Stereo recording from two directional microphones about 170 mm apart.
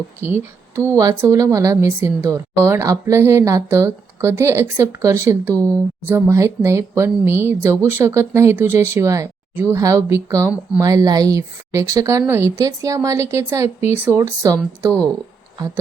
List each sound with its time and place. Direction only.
0.2 s speech: 15° right (ahead or behind)